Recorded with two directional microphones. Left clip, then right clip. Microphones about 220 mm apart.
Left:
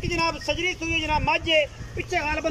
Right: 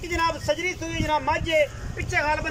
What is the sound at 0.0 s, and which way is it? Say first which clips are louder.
A man's voice: right 1 dB; 10° left (ahead or behind).